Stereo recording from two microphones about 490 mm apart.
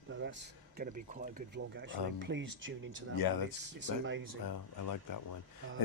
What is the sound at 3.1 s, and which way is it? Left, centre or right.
Speech, left.